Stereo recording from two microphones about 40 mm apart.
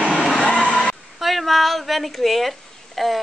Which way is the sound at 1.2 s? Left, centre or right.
Centre.